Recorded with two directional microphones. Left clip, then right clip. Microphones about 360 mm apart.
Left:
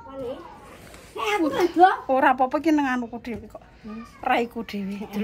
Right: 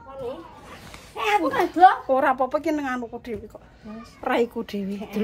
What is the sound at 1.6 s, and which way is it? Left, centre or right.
A woman's voice, centre.